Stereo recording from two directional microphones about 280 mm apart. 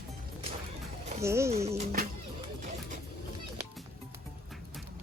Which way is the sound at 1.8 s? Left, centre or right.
Right.